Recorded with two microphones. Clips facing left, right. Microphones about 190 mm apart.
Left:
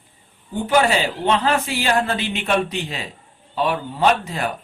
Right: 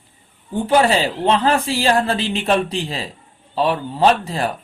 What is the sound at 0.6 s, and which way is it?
A man's voice, 35° right (ahead or behind).